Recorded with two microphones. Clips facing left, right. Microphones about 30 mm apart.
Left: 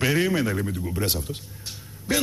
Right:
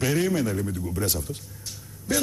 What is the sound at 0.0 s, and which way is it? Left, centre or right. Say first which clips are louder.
Speech: left 2 dB; left.